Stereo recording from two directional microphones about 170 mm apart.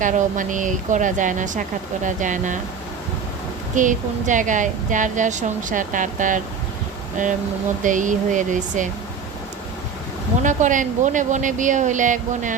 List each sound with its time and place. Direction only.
0.0 s a woman's voice: 50° right (ahead or behind)
3.8 s a woman's voice: 50° right (ahead or behind)
10.4 s a woman's voice: 50° right (ahead or behind)